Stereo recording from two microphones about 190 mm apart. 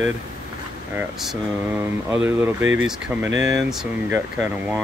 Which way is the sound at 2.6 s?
90° right.